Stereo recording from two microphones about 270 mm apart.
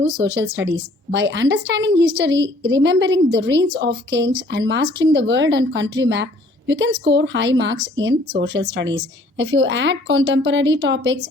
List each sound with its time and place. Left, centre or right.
0.3 s a woman's voice: right